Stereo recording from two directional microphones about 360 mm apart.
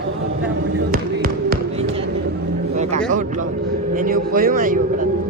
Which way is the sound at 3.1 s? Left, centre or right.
Right.